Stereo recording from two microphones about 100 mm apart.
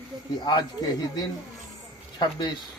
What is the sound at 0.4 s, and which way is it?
Speech, 45° left (ahead or behind).